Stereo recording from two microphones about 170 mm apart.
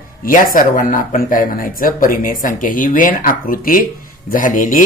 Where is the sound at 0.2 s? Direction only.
55° left (ahead or behind).